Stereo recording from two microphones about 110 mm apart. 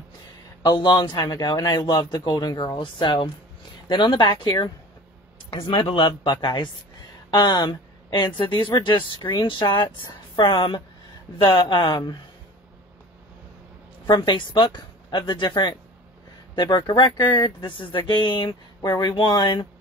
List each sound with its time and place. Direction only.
0.7 s a man's voice: 40° left (ahead or behind)
14.0 s speech: 45° left (ahead or behind)